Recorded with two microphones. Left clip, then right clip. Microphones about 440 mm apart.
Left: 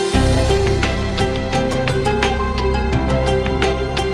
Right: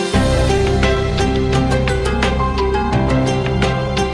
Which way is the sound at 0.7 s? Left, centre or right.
Centre.